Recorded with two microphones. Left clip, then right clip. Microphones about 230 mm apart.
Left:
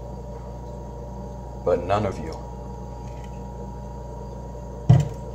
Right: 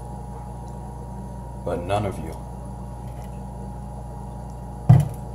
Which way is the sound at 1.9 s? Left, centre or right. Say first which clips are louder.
Left 2 dB; centre.